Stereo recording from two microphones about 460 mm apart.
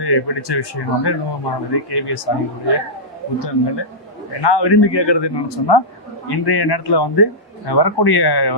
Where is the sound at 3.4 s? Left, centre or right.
Left.